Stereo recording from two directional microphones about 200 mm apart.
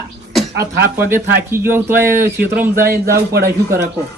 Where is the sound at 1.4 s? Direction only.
10° right (ahead or behind).